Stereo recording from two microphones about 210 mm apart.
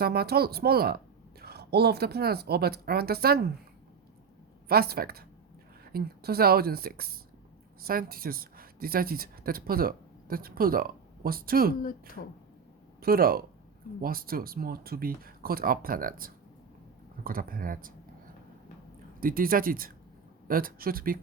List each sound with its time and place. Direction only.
0.0 s a woman's voice: 50° right (ahead or behind)
4.7 s a woman's voice: 45° right (ahead or behind)
13.0 s a woman's voice: 45° right (ahead or behind)
19.2 s a woman's voice: 40° right (ahead or behind)